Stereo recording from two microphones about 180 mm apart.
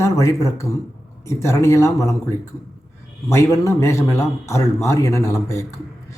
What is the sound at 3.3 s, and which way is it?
A man's voice, 15° left (ahead or behind).